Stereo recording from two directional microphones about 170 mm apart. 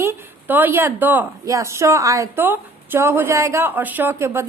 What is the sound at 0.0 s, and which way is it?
A woman's voice, 10° right (ahead or behind).